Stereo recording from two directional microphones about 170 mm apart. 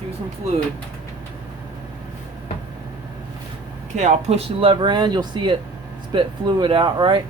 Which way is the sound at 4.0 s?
40° right (ahead or behind).